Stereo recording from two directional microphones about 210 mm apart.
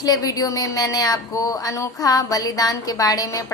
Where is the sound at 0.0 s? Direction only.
15° left (ahead or behind).